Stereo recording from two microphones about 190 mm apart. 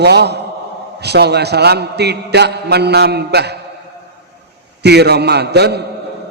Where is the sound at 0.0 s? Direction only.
60° right (ahead or behind).